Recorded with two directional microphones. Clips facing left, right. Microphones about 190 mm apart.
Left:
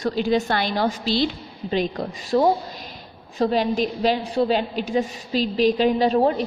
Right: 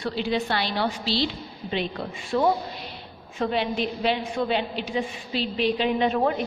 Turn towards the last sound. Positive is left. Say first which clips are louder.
# left 4 dB
turn(degrees=35)  # may be behind; listen again after turning